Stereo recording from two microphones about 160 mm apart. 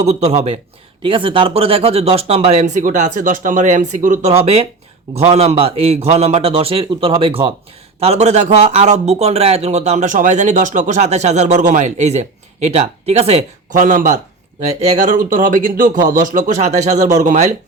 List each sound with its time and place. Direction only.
0.0 s a man's voice: 45° right (ahead or behind)